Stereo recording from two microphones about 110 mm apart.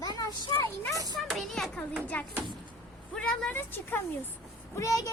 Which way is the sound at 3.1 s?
10° left (ahead or behind).